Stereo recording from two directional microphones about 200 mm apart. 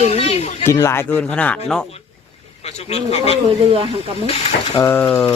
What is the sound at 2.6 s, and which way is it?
Speech, 30° left (ahead or behind).